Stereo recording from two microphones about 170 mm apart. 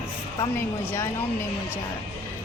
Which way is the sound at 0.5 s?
15° left (ahead or behind).